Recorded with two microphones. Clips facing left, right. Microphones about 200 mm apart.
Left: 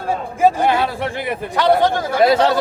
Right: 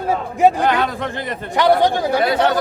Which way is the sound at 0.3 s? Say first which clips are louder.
Right 1 dB; 20° right (ahead or behind).